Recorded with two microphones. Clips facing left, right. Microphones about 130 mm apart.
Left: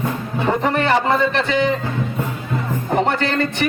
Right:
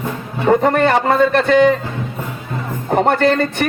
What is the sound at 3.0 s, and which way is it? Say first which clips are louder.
Speech: right 5 dB; 50° right (ahead or behind).